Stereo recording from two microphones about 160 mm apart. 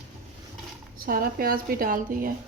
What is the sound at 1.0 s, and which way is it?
A woman's voice, 65° right (ahead or behind).